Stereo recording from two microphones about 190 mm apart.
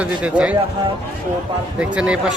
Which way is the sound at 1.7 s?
5° right (ahead or behind).